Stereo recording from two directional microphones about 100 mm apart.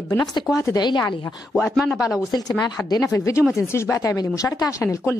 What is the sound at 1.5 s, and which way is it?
Speech, 5° left (ahead or behind).